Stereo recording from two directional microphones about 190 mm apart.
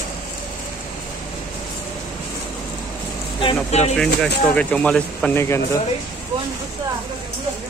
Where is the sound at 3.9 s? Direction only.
5° left (ahead or behind).